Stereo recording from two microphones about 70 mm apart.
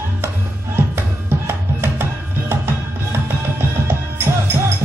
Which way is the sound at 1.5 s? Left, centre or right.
Right.